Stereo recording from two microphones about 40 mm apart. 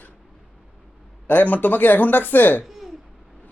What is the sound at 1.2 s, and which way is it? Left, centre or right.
Speech, left.